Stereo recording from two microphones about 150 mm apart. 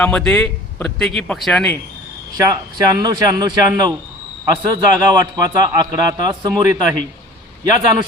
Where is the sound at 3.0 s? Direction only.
25° right (ahead or behind).